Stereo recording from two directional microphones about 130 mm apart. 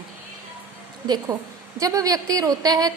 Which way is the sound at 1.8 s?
25° right (ahead or behind).